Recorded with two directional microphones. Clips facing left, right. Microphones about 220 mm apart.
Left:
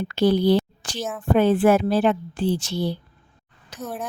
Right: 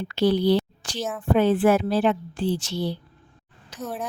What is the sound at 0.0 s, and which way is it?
A woman's voice, 50° left (ahead or behind).